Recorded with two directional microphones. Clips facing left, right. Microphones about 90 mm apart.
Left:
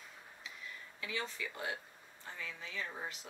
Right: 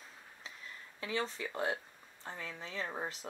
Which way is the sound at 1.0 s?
35° right (ahead or behind).